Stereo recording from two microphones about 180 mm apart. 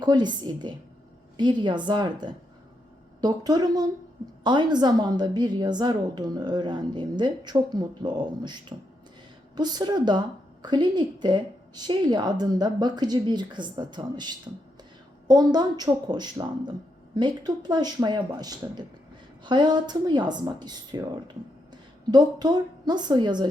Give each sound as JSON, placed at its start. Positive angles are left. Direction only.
{"t": 0.0, "sound": "a woman's voice", "side_deg": -25}